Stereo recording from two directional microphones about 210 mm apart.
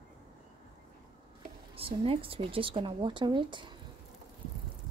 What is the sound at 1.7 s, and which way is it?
Speech, 25° right (ahead or behind).